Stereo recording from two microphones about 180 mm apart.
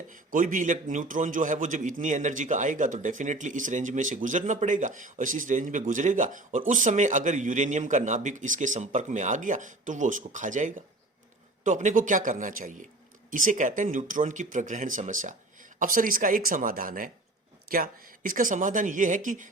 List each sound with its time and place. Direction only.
0.1 s a man's voice: 45° right (ahead or behind)